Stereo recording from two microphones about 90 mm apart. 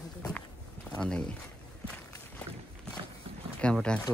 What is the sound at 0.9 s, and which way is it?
Speech, 10° left (ahead or behind).